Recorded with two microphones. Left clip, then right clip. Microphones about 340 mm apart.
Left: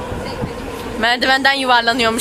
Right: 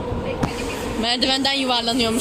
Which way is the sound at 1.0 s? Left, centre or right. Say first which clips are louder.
Left 7 dB; left.